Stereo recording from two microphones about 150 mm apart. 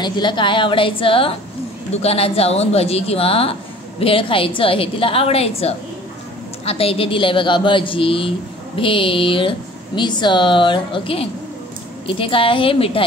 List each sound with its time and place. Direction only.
0.0 s speech: 30° left (ahead or behind)